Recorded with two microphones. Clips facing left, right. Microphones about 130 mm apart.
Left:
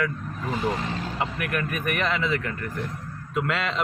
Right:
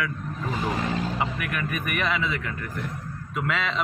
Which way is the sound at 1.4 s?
Centre (ahead or behind).